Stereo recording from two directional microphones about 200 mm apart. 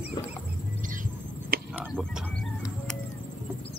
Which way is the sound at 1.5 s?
50° right (ahead or behind).